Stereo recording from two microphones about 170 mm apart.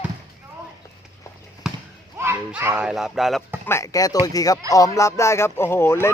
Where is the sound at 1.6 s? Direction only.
Centre (ahead or behind).